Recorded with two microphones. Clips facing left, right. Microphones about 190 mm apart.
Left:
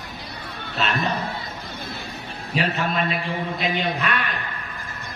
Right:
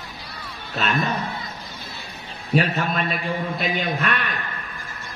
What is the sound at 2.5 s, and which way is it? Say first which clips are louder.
A man's voice: right 2 dB; 45° right (ahead or behind).